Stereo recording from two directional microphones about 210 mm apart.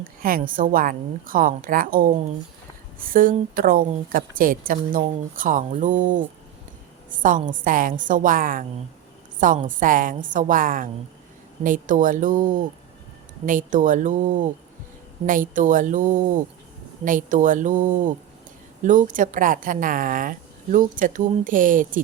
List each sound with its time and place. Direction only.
0.2 s a woman's voice: 40° right (ahead or behind)